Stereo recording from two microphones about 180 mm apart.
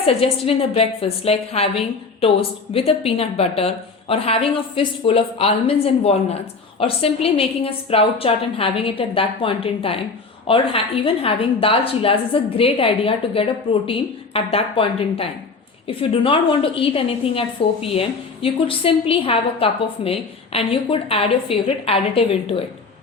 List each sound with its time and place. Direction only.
0.0 s a woman's voice: 35° left (ahead or behind)